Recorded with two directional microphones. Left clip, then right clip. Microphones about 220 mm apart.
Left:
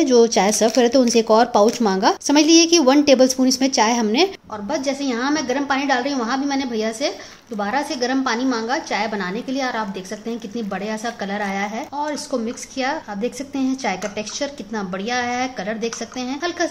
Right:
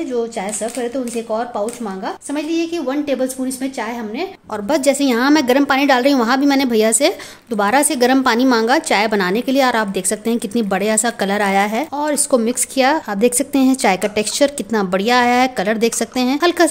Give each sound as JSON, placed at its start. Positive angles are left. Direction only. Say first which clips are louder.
{"t": 0.1, "sound": "speech", "louder": "left 8 dB", "side_deg": 40}
{"t": 4.6, "sound": "a woman's voice", "louder": "right 8 dB", "side_deg": -45}